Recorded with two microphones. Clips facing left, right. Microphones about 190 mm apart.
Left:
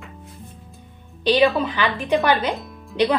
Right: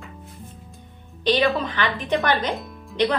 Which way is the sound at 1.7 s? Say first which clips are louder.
Left 3 dB; 10° left (ahead or behind).